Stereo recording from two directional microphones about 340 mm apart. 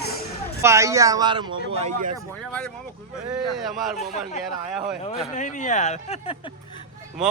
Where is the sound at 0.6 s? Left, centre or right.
Centre.